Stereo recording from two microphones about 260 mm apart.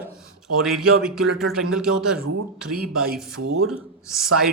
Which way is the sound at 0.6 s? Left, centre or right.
Centre.